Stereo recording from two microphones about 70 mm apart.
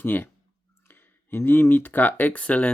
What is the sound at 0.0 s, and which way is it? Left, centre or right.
Speech, left.